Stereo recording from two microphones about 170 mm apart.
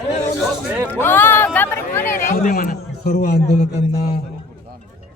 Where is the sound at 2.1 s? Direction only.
55° left (ahead or behind).